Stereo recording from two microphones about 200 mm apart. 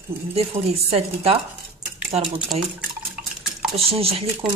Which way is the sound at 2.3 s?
Centre (ahead or behind).